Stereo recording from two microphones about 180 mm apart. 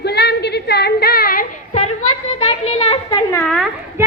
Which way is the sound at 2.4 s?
35° left (ahead or behind).